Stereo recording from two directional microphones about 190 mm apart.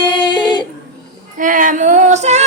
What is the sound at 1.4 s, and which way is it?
Female singing, 45° right (ahead or behind).